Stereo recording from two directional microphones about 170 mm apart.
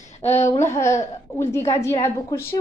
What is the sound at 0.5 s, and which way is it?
A woman's voice, 15° left (ahead or behind).